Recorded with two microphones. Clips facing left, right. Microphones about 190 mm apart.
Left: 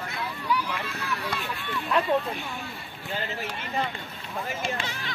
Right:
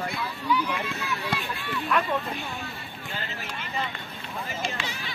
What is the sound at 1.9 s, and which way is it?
Speech, 30° left (ahead or behind).